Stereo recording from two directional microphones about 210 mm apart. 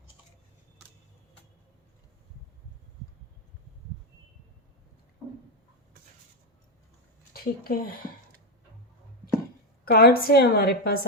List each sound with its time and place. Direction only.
7.3 s speech: 45° left (ahead or behind)
9.8 s a woman's voice: 45° left (ahead or behind)